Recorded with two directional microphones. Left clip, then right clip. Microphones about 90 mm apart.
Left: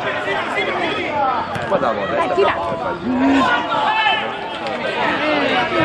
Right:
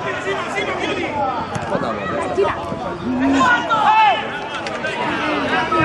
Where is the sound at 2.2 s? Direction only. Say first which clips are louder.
Left 3 dB; 45° left (ahead or behind).